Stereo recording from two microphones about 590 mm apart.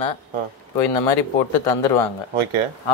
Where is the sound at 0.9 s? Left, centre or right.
Left.